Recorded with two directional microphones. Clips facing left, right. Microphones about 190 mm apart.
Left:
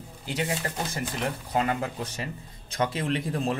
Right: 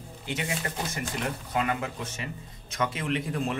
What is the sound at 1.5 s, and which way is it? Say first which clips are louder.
Speech: left 2 dB; 35° left (ahead or behind).